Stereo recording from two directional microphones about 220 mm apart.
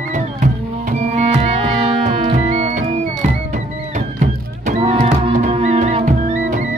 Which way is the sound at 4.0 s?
35° right (ahead or behind).